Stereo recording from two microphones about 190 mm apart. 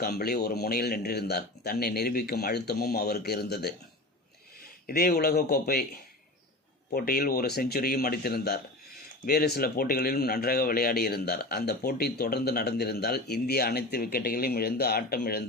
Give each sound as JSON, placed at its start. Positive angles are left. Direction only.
{"t": 0.0, "sound": "speech", "side_deg": 55}
{"t": 4.9, "sound": "speech", "side_deg": 50}